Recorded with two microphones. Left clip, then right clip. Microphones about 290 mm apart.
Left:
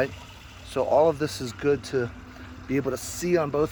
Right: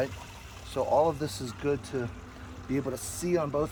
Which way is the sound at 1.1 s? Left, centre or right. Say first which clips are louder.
Left 6 dB; centre.